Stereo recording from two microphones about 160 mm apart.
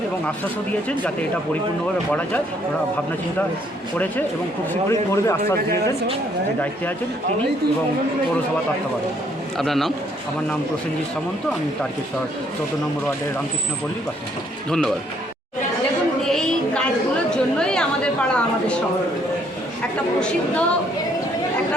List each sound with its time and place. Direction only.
0.3 s speech: 10° left (ahead or behind)
4.7 s speech: 20° left (ahead or behind)
9.6 s speech: centre (ahead or behind)
14.7 s speech: 5° left (ahead or behind)
16.2 s a sound: 5° left (ahead or behind)
17.3 s chatter: 5° left (ahead or behind)
20.1 s speech: 5° left (ahead or behind)